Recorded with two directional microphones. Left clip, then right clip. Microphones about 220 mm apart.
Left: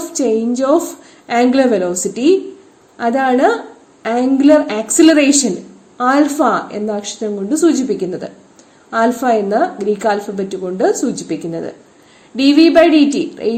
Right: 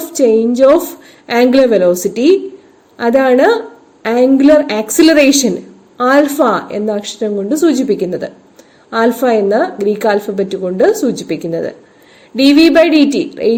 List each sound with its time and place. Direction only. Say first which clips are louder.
0.1 s a woman's voice: right 6 dB; 35° right (ahead or behind)